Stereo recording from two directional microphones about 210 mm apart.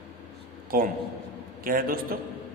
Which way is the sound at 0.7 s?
45° right (ahead or behind).